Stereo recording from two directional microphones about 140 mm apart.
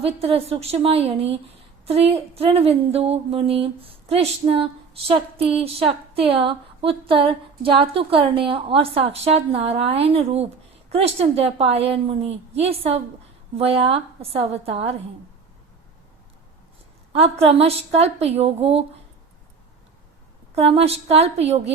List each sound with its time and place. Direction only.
0.0 s speech: 45° right (ahead or behind)
17.1 s speech: 45° right (ahead or behind)
20.6 s speech: 45° right (ahead or behind)